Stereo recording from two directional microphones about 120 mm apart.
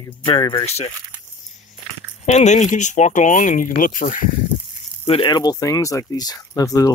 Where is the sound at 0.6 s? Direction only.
65° left (ahead or behind).